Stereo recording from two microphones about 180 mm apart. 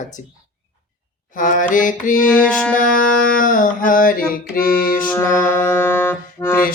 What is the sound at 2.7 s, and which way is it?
Music, 50° left (ahead or behind).